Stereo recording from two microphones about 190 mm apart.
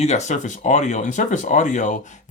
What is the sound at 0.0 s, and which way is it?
Speech, 35° left (ahead or behind).